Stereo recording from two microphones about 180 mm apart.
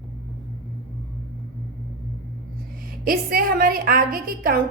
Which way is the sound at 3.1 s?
55° right (ahead or behind).